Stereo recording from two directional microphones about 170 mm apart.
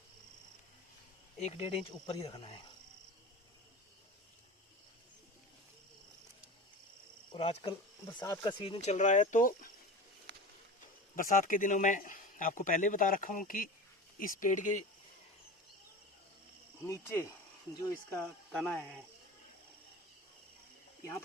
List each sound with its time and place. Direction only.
1.4 s speech: 35° left (ahead or behind)
7.3 s speech: 35° left (ahead or behind); by 9.7 s 55° left (ahead or behind)
10.3 s a sound: 90° right
11.1 s a man's voice: 50° left (ahead or behind)
16.8 s cricket: 15° left (ahead or behind)
18.5 s speech: 5° left (ahead or behind)